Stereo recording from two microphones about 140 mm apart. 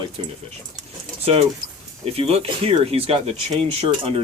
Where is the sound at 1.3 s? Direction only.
50° right (ahead or behind).